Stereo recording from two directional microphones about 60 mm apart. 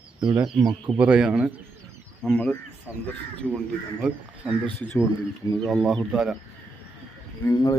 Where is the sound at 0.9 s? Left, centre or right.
Right.